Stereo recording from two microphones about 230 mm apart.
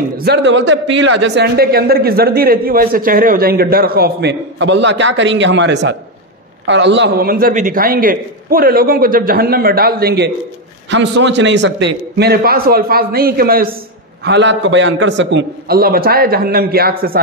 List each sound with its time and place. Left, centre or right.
0.2 s a man's voice: right